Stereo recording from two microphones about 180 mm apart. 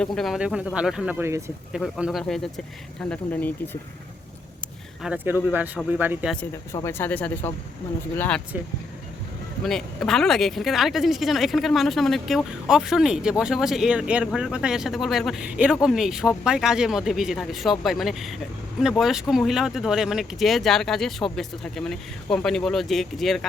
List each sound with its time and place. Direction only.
0.0 s speech: centre (ahead or behind)
1.2 s speech: 15° right (ahead or behind)
1.7 s speech: 5° right (ahead or behind)
5.0 s speech: 10° right (ahead or behind)
6.8 s speech: 10° left (ahead or behind)
9.6 s speech: centre (ahead or behind)